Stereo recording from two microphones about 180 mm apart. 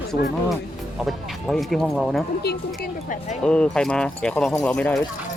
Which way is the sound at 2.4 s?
55° left (ahead or behind).